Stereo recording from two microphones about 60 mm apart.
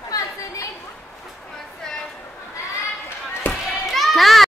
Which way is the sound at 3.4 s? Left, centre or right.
Left.